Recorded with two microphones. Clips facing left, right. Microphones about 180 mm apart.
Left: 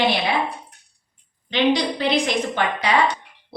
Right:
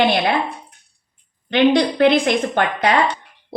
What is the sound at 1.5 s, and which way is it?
A woman's voice, 55° right (ahead or behind).